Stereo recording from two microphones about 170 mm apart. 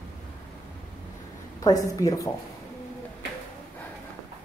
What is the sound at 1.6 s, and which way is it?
Speech, 20° left (ahead or behind).